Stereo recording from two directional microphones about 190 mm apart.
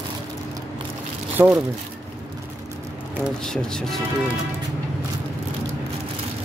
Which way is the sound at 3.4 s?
5° left (ahead or behind).